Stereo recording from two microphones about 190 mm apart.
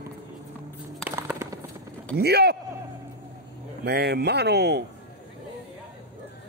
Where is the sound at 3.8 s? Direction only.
60° right (ahead or behind).